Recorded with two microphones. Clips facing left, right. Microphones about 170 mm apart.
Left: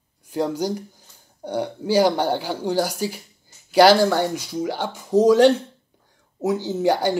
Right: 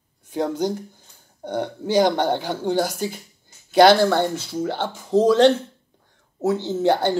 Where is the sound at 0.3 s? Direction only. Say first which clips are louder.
Even; 10° left (ahead or behind).